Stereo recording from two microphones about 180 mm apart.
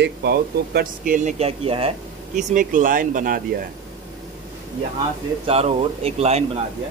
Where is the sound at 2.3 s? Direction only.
45° right (ahead or behind).